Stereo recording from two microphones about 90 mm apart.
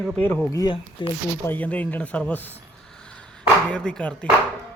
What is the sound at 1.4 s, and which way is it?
Speech, 20° left (ahead or behind).